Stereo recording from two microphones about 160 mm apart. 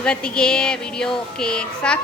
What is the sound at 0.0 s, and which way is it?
Speech, 5° left (ahead or behind).